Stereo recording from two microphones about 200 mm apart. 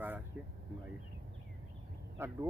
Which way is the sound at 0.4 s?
10° right (ahead or behind).